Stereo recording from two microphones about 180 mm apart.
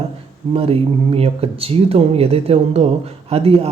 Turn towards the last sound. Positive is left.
turn(degrees=-30)  # may be behind; listen again after turning